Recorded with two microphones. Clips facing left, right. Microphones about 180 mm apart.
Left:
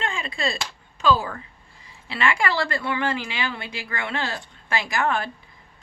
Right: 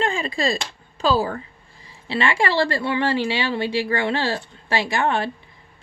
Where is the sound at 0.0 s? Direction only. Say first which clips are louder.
Right 5 dB; 35° right (ahead or behind).